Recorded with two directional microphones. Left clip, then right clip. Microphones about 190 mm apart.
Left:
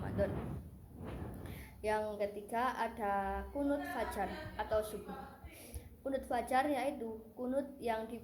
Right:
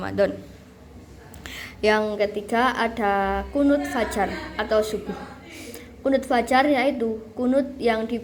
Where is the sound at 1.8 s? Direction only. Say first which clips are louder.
Right 15 dB; 45° right (ahead or behind).